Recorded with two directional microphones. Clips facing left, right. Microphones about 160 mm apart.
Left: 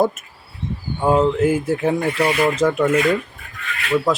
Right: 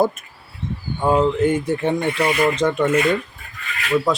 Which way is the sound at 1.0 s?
5° left (ahead or behind).